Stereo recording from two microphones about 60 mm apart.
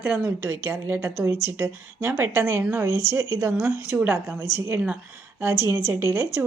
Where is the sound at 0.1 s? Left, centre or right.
Right.